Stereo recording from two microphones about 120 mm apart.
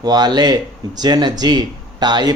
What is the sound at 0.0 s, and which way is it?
Speech, 35° right (ahead or behind).